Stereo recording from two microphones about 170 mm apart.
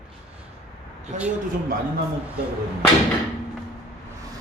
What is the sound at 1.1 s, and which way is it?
Speech, 45° right (ahead or behind).